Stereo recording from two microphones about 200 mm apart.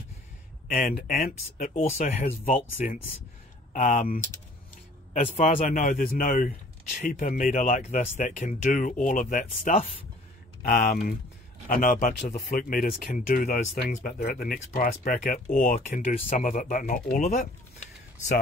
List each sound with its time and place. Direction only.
0.7 s speech: 45° left (ahead or behind)
1.7 s speech: 30° left (ahead or behind)
2.4 s speech: 40° left (ahead or behind)